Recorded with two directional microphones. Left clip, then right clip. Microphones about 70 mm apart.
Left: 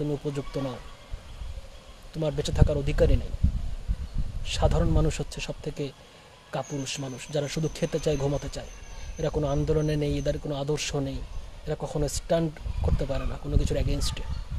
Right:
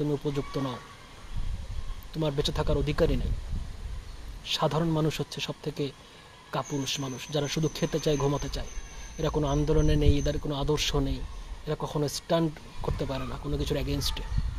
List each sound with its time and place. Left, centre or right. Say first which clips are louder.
0.2 s speech: even; left
2.1 s speech: even; left
4.5 s speech: even; left